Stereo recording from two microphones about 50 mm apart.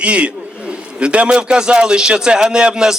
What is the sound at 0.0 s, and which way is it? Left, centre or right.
A man's voice, right.